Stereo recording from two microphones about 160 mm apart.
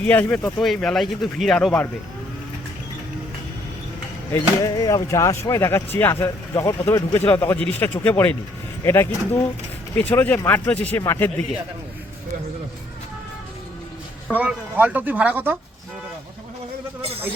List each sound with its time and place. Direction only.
0.0 s speech: 10° left (ahead or behind)
4.3 s speech: 20° left (ahead or behind)
14.3 s speech: 10° right (ahead or behind)